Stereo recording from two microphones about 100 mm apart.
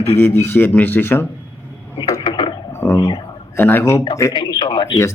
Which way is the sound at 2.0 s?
35° left (ahead or behind).